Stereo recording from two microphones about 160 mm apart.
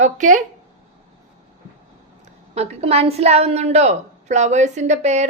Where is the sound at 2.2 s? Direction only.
40° right (ahead or behind).